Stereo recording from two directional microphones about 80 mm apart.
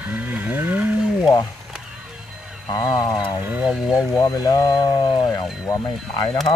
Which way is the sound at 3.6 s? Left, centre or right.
Centre.